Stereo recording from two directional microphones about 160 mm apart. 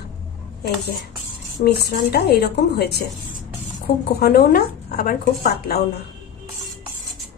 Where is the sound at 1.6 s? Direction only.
75° left (ahead or behind).